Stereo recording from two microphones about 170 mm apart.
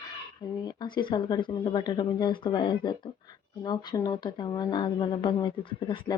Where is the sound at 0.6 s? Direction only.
25° left (ahead or behind).